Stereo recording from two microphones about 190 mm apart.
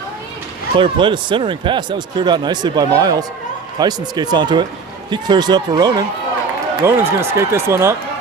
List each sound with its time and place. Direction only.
0.8 s speech: 25° right (ahead or behind)